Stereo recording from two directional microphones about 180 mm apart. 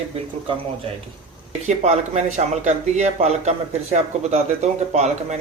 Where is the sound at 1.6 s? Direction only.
40° right (ahead or behind).